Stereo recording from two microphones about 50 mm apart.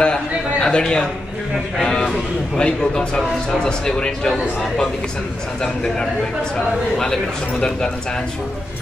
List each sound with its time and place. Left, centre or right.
0.0 s a man's voice: centre